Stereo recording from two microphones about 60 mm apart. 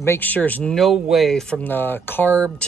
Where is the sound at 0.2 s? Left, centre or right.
Left.